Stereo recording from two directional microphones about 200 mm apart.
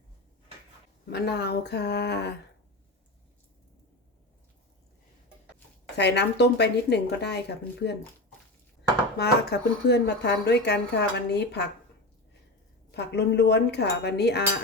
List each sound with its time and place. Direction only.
1.1 s speech: 55° left (ahead or behind)
6.0 s speech: 55° left (ahead or behind)
9.1 s speech: 55° left (ahead or behind)
12.9 s speech: 55° left (ahead or behind)